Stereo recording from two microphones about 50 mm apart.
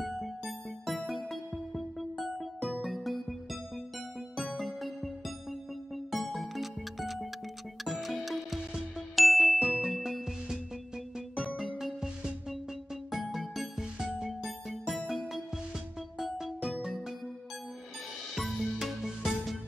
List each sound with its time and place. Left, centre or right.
0.0 s music: centre
4.6 s music: centre
9.1 s ding: centre
11.1 s music: right
11.5 s music: centre
18.3 s music: centre